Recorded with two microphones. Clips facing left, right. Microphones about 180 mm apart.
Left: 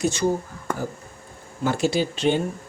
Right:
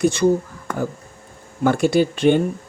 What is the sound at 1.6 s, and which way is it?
Speech, 55° right (ahead or behind).